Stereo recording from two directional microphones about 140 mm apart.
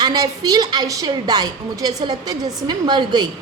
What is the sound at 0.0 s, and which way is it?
A woman's voice, 30° right (ahead or behind).